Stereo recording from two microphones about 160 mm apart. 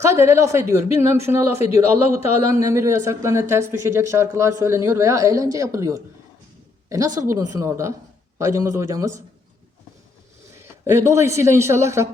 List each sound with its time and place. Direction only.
0.0 s speech: 15° right (ahead or behind)
7.2 s a man's voice: 20° right (ahead or behind)
10.6 s a man's voice: 15° right (ahead or behind)